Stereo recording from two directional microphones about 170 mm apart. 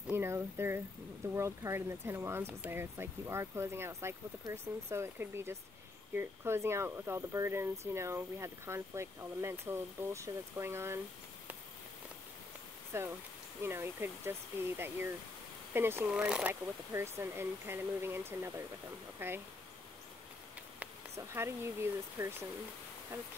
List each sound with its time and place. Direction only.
0.0 s speech: 15° right (ahead or behind)
12.9 s speech: 15° right (ahead or behind)
15.7 s speech: 15° right (ahead or behind)
16.9 s speech: 15° right (ahead or behind)
21.3 s speech: 15° right (ahead or behind)